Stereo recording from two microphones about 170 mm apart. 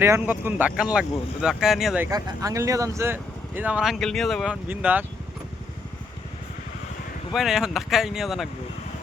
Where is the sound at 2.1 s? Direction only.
20° right (ahead or behind); by 4.5 s centre (ahead or behind).